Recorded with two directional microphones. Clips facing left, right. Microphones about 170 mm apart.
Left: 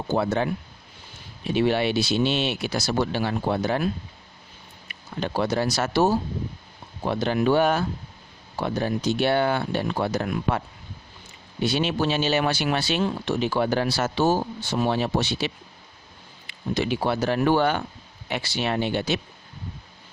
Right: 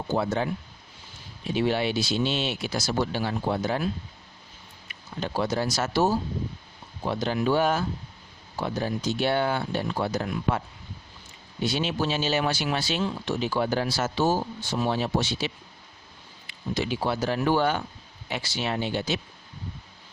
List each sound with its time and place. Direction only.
0.1 s speech: 65° left (ahead or behind)
1.5 s speech: 65° left (ahead or behind)
4.9 s speech: 65° left (ahead or behind)
11.6 s speech: 65° left (ahead or behind)